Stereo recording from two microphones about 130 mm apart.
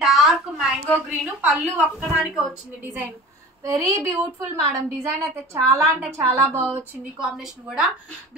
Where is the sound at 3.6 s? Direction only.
25° right (ahead or behind).